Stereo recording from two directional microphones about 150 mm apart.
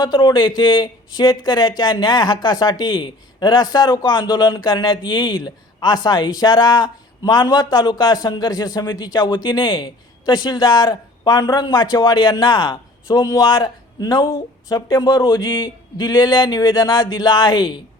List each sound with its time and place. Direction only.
0.0 s speech: 25° left (ahead or behind)